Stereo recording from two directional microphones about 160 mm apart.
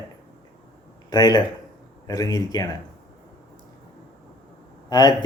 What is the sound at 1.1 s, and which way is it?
Speech, 25° left (ahead or behind).